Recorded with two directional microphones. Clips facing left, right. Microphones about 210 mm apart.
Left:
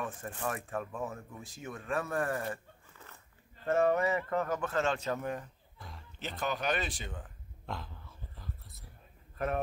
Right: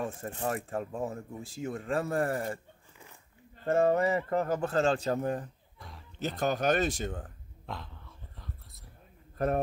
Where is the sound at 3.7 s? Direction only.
30° right (ahead or behind).